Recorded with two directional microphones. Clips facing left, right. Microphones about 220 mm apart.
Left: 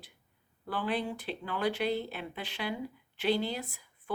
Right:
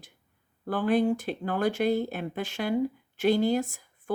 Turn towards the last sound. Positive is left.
turn(degrees=-45)  # may be behind; listen again after turning